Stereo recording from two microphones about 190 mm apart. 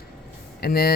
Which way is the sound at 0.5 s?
55° left (ahead or behind).